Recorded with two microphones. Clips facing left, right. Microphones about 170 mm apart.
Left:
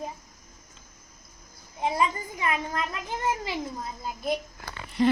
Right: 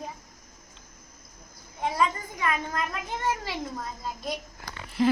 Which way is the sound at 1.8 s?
20° left (ahead or behind).